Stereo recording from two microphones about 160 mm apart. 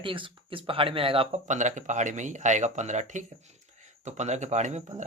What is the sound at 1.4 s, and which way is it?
Speech, 50° right (ahead or behind).